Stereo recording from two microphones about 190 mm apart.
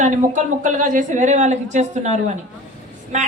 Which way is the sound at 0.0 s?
40° right (ahead or behind).